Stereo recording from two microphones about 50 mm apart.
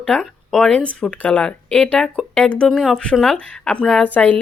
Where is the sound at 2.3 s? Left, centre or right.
Left.